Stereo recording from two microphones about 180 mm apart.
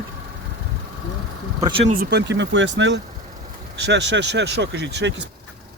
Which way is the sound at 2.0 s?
70° right (ahead or behind).